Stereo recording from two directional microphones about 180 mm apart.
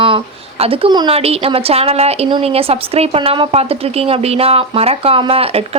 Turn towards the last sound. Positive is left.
turn(degrees=-30)  # may be behind; listen again after turning